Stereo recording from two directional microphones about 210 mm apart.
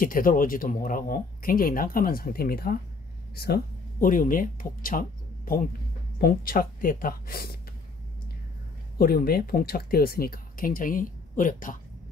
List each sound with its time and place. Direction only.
0.0 s speech: 40° left (ahead or behind)
8.9 s speech: 45° left (ahead or behind)